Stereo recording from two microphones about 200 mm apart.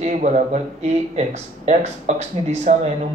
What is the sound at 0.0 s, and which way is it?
Speech, 35° right (ahead or behind).